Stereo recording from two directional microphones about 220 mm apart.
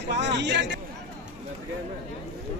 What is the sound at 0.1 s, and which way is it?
Speech, 50° right (ahead or behind).